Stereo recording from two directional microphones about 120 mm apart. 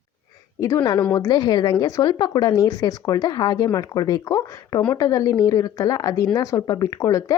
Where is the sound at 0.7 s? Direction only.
40° left (ahead or behind).